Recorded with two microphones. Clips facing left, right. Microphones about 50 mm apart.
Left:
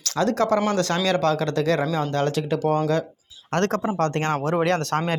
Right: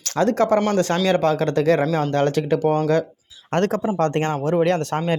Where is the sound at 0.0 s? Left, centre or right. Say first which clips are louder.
Right 3 dB; right.